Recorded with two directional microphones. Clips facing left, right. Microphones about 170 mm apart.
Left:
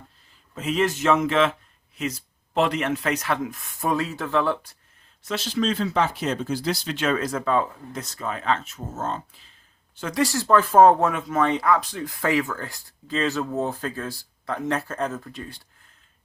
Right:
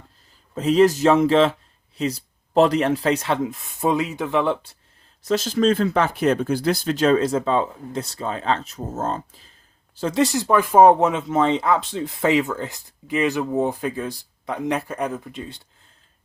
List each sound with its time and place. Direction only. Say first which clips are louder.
0.5 s speech: right 8 dB; 35° right (ahead or behind)
5.2 s speech: right 6 dB; 40° right (ahead or behind); by 15.6 s 20° right (ahead or behind)